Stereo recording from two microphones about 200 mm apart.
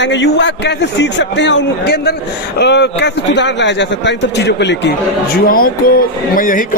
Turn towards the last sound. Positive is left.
turn(degrees=45)  # may be behind; listen again after turning